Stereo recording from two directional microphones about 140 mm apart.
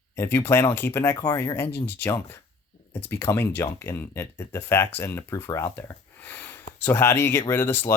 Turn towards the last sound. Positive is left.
turn(degrees=15)  # may be behind; listen again after turning